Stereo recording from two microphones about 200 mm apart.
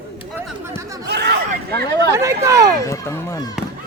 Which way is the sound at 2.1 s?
15° right (ahead or behind).